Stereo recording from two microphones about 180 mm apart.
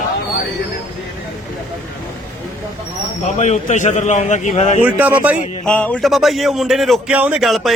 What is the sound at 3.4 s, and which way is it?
A man's voice, 40° left (ahead or behind).